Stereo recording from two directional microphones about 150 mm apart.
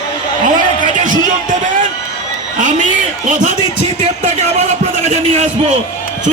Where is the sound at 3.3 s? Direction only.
60° right (ahead or behind).